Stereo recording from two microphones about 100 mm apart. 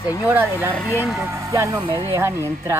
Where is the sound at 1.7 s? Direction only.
60° right (ahead or behind).